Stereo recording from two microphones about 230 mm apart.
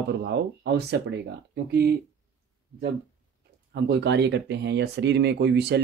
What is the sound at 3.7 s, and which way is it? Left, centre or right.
Speech, right.